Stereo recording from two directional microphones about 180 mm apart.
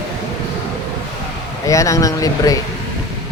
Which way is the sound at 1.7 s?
20° left (ahead or behind).